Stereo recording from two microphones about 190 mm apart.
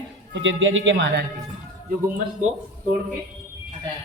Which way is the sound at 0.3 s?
80° right.